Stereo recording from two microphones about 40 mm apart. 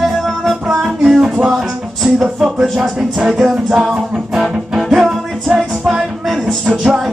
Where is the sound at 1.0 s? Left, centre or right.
Centre.